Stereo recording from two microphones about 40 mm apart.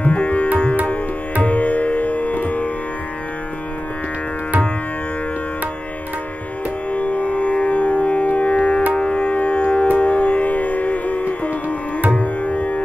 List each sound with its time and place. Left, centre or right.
0.0 s music: left
6.9 s music: left